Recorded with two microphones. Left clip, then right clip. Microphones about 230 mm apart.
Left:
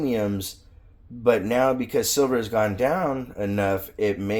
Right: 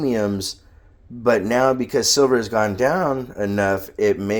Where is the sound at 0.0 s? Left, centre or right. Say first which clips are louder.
Right 4 dB; right.